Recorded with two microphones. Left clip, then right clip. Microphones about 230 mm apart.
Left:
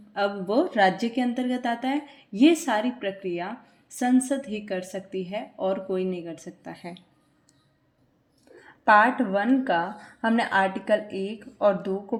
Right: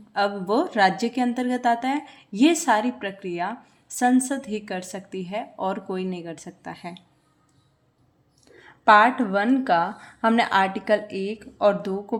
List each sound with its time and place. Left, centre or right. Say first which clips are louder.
0.2 s a woman's voice: right 2 dB; right
8.9 s a woman's voice: right 3 dB; centre